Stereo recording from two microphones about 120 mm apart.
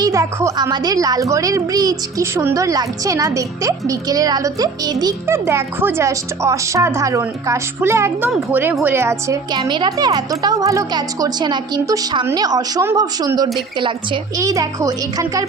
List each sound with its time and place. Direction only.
0.0 s a woman's voice: 25° right (ahead or behind)
5.2 s a woman's voice: 20° right (ahead or behind)
13.7 s a woman's voice: 45° right (ahead or behind)
14.3 s speech: 30° right (ahead or behind)